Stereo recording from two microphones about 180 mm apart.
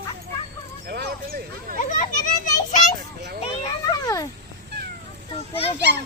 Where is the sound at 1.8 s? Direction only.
45° left (ahead or behind).